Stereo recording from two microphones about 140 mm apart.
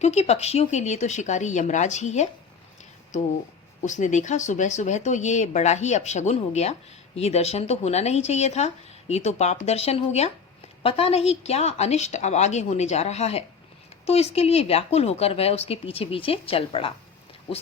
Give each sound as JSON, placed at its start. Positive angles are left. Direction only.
{"t": 0.0, "sound": "speech", "side_deg": 50}
{"t": 3.8, "sound": "speech", "side_deg": 60}